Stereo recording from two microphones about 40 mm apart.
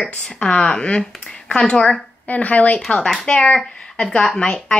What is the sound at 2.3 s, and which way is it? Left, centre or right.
Speech, left.